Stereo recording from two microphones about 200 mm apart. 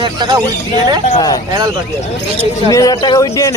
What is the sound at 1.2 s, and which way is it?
Speech, 20° left (ahead or behind).